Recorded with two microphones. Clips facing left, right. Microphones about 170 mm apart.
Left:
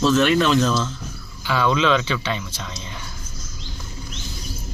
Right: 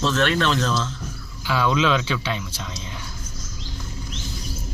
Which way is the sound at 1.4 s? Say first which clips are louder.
Left 1 dB; 5° right (ahead or behind).